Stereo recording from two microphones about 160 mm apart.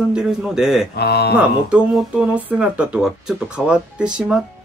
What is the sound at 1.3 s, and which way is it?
Speech, 5° right (ahead or behind).